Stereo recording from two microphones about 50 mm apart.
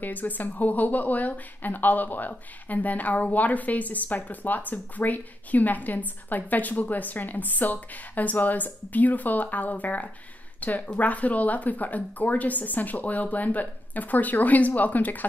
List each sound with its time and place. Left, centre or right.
0.0 s a woman's voice: left